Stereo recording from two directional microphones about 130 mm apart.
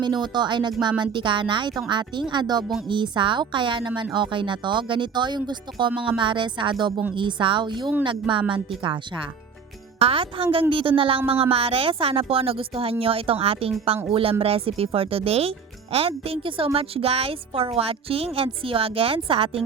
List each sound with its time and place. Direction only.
0.0 s speech: 35° right (ahead or behind)